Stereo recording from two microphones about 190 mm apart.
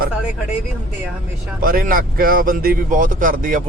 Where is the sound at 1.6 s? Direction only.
50° right (ahead or behind).